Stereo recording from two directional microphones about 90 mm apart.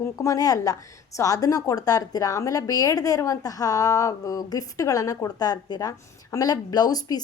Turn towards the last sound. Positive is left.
turn(degrees=45)  # may be behind; listen again after turning